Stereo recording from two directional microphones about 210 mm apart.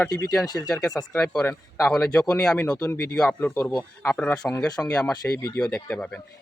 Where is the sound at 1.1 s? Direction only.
5° left (ahead or behind).